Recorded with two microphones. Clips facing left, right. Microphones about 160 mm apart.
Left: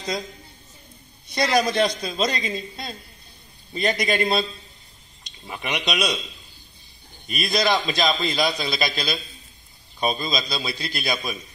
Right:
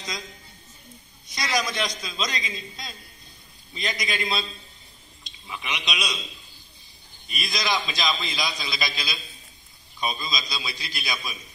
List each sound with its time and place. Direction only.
1.2 s a man's voice: 60° left (ahead or behind)
5.5 s a man's voice: 55° left (ahead or behind)
7.2 s a man's voice: 60° left (ahead or behind)
9.9 s a man's voice: 35° left (ahead or behind)
10.3 s a man's voice: 55° left (ahead or behind)